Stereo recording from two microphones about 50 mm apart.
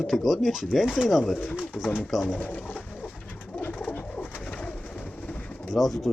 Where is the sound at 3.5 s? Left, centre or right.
Left.